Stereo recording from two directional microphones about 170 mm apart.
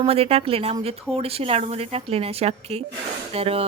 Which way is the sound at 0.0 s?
35° right (ahead or behind).